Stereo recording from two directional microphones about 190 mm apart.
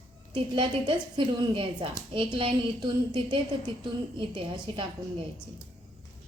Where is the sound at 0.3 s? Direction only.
25° right (ahead or behind).